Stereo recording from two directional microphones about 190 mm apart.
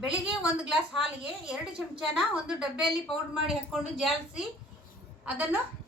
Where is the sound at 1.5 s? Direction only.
5° right (ahead or behind).